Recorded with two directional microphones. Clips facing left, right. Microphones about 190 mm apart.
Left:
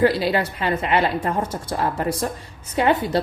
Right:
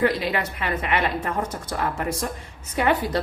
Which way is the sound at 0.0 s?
30° left (ahead or behind).